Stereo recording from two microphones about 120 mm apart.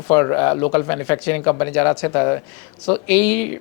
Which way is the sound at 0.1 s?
15° left (ahead or behind).